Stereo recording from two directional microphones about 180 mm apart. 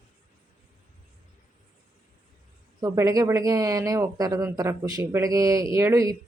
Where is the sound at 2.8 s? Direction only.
20° right (ahead or behind).